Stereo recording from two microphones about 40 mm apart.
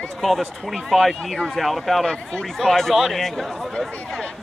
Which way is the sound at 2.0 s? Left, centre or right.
Left.